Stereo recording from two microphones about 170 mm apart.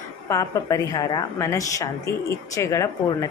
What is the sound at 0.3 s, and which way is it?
A woman's voice, 20° left (ahead or behind).